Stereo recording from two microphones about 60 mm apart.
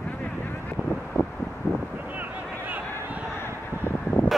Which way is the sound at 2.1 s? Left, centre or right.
Right.